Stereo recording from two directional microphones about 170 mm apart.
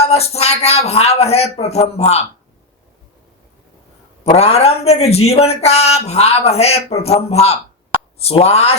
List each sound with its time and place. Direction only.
0.0 s speech: 35° left (ahead or behind)
4.2 s speech: 35° left (ahead or behind)